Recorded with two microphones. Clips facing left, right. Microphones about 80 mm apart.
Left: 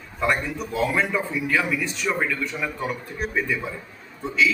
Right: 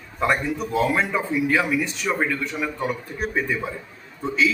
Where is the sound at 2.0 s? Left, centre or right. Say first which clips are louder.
Even; centre.